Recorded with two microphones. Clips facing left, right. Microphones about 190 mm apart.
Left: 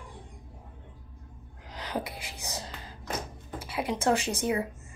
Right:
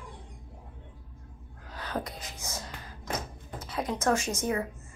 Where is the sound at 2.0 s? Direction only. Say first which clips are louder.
Left 1 dB; 5° left (ahead or behind).